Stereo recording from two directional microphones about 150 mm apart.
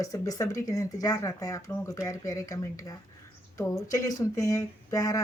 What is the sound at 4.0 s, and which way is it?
A woman's voice, 20° left (ahead or behind).